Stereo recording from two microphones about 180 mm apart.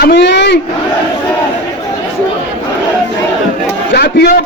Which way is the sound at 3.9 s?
60° left (ahead or behind).